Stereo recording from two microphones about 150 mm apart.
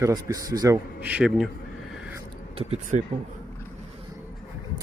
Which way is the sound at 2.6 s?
45° right (ahead or behind).